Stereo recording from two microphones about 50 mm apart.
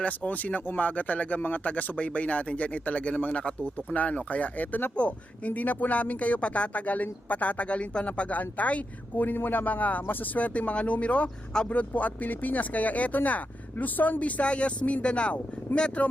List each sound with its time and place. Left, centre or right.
0.0 s speech: left